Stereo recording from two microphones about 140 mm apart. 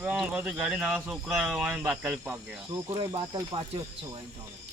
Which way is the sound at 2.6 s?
30° right (ahead or behind).